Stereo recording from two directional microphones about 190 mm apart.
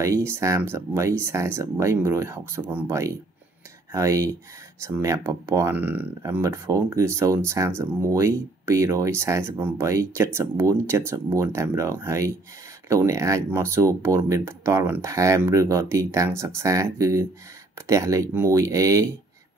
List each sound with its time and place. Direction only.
0.0 s speech: 15° right (ahead or behind)